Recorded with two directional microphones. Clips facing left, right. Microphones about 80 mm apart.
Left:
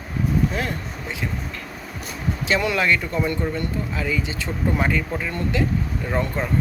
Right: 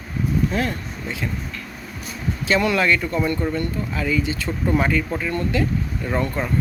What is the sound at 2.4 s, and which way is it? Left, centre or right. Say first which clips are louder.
Speech: right 2 dB; centre.